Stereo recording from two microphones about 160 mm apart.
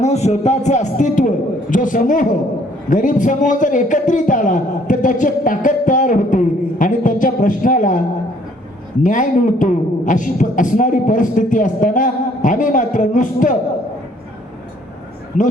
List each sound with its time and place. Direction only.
0.0 s a man's voice: 45° left (ahead or behind)
9.0 s a man's voice: 55° left (ahead or behind)